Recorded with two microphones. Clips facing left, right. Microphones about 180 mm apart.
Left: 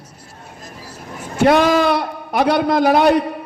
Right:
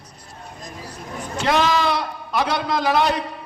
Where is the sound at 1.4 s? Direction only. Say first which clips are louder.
Left 7 dB; 55° left (ahead or behind).